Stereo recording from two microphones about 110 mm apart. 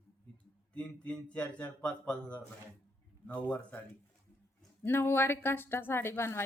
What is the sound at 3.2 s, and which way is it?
Speech, 15° left (ahead or behind).